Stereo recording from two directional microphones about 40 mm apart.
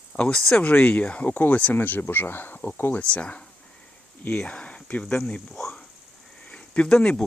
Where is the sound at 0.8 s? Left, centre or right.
Left.